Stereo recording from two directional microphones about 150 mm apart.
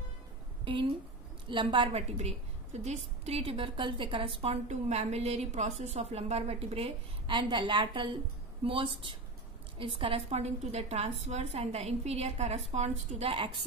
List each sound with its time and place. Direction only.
1.5 s a woman's voice: 35° right (ahead or behind)